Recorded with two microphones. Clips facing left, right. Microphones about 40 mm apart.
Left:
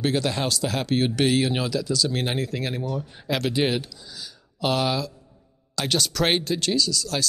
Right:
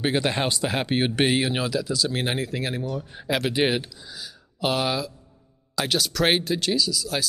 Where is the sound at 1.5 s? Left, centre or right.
Centre.